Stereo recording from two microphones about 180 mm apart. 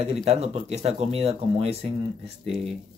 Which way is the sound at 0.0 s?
35° right (ahead or behind).